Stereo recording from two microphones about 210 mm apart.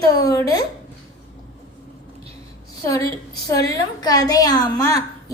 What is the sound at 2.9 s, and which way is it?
A woman's voice, 15° left (ahead or behind).